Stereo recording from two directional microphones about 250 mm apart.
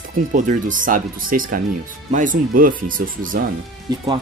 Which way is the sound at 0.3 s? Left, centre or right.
Right.